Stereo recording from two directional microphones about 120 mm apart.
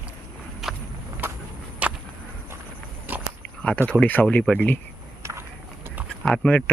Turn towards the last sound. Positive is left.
turn(degrees=10)  # may be behind; listen again after turning